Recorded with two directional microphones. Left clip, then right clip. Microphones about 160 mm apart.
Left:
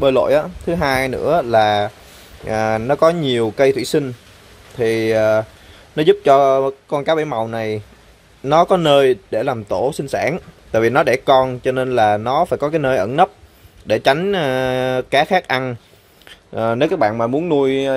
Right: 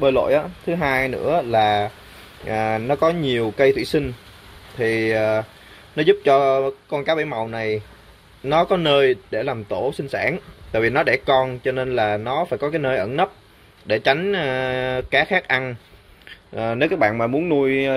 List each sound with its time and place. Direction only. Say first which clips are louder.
0.0 s speech: left 3 dB; 20° left (ahead or behind)